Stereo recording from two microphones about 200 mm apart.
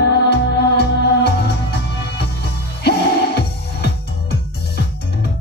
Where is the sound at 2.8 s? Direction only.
55° left (ahead or behind).